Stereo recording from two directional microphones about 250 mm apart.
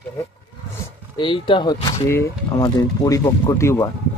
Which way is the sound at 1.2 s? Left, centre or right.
Centre.